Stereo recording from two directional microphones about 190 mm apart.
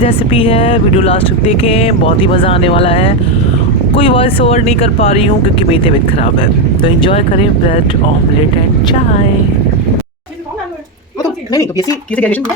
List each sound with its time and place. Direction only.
0.0 s speech: 30° left (ahead or behind)
11.5 s speech: 20° left (ahead or behind)
12.1 s speech: 10° left (ahead or behind)